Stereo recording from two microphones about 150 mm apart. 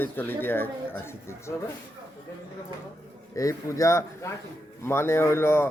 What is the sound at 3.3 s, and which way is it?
Speech, 20° left (ahead or behind).